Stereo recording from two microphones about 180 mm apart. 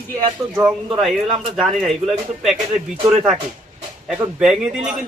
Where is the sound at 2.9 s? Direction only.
30° right (ahead or behind).